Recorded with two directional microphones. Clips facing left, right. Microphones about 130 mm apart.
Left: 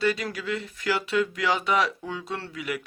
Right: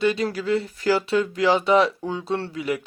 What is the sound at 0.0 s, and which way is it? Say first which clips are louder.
Speech: right 4 dB; 25° right (ahead or behind).